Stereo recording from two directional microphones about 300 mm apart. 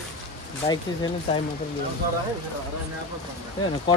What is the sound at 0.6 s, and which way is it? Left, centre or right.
Speech, centre.